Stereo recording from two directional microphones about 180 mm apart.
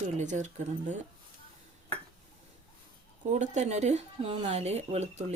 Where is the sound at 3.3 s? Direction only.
40° right (ahead or behind).